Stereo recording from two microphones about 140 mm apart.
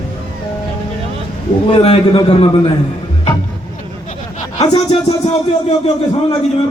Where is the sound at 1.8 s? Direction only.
40° left (ahead or behind).